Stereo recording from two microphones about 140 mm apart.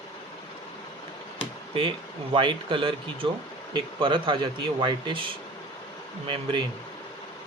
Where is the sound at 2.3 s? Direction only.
35° right (ahead or behind).